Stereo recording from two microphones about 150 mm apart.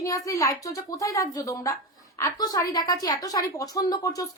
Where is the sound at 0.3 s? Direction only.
20° left (ahead or behind).